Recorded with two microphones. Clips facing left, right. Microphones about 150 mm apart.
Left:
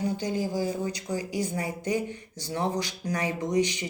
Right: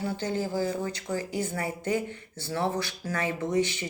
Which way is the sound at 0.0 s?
15° left (ahead or behind).